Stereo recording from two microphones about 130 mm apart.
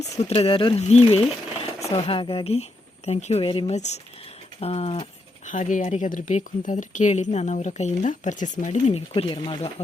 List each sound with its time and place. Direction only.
0.2 s speech: 50° left (ahead or behind)
0.8 s speech: 55° left (ahead or behind)
1.9 s speech: 45° left (ahead or behind)
3.7 s speech: 60° left (ahead or behind)
4.6 s speech: 50° left (ahead or behind)
5.5 s speech: 80° left
9.0 s speech: 45° left (ahead or behind)